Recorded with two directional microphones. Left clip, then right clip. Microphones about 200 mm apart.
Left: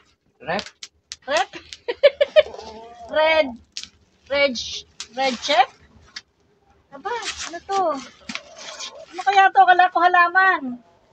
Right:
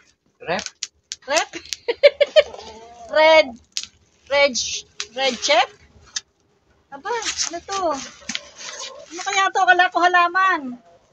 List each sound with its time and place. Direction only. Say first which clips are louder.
0.4 s speech: right 1 dB; 25° right (ahead or behind)
1.2 s a sound: even; 30° right (ahead or behind)
3.1 s speech: right 4 dB; 25° right (ahead or behind)
3.7 s a sound: right 5 dB; 10° right (ahead or behind)
4.3 s speech: right 3 dB; 30° right (ahead or behind)
6.2 s tick-tock: right 8 dB; 20° right (ahead or behind)
7.2 s speech: right 2 dB; 15° right (ahead or behind)
9.1 s speech: left 5 dB; 30° right (ahead or behind)